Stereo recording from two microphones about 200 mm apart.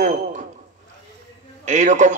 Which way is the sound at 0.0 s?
40° right (ahead or behind).